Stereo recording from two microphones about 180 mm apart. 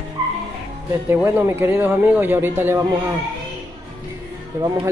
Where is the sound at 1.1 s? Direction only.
10° right (ahead or behind).